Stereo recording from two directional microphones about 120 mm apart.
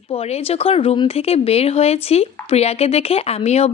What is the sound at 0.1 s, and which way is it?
Speech, 55° left (ahead or behind).